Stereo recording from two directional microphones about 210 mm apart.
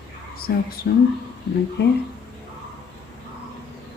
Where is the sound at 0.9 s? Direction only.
55° left (ahead or behind).